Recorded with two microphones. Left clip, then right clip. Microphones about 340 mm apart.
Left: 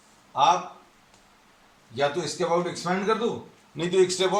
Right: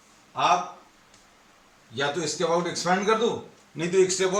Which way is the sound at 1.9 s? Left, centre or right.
Centre.